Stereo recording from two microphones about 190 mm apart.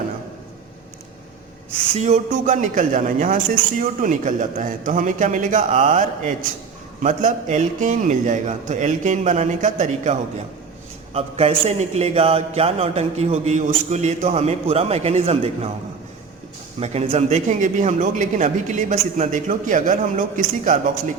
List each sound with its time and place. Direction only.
2.0 s a man's voice: 40° right (ahead or behind)
16.8 s a man's voice: 35° right (ahead or behind)